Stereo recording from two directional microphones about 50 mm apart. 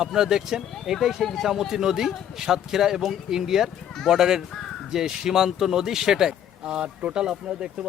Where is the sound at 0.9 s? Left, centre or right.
Centre.